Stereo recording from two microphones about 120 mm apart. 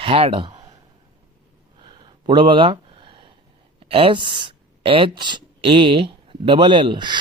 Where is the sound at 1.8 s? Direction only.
40° right (ahead or behind).